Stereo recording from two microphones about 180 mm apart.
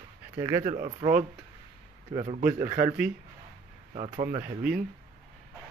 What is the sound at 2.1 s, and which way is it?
Speech, 35° right (ahead or behind).